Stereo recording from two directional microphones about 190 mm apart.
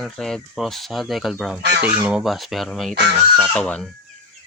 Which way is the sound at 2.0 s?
5° right (ahead or behind).